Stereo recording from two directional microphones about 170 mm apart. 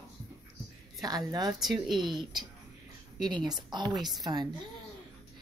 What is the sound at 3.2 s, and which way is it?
Speech, 25° right (ahead or behind).